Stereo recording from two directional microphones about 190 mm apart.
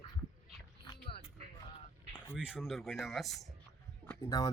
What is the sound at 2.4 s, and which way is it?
Speech, 5° right (ahead or behind).